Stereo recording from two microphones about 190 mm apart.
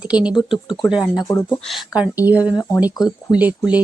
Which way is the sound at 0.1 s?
5° right (ahead or behind).